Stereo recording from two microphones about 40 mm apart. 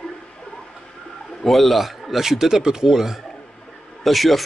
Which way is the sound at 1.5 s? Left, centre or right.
Centre.